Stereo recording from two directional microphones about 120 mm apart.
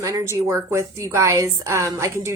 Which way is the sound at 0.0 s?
30° right (ahead or behind).